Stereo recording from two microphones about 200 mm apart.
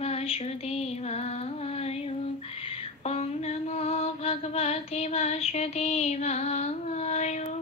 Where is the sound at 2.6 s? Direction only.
30° left (ahead or behind).